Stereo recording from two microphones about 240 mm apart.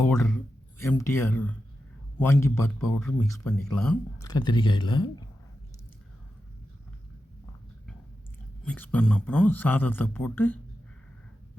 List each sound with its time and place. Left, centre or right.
0.8 s speech: centre
4.3 s speech: centre
8.6 s speech: centre